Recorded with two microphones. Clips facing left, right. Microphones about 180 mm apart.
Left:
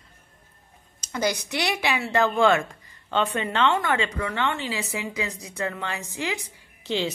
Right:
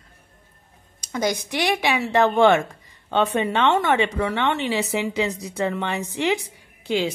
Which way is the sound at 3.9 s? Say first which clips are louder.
Right 5 dB; 20° right (ahead or behind).